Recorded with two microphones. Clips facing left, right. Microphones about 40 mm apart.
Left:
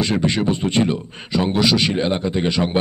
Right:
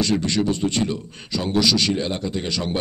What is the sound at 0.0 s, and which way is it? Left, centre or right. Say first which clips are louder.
A man's voice: left 2 dB; left.